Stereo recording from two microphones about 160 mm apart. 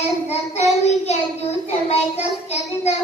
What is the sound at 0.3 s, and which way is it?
Child singing, 45° left (ahead or behind).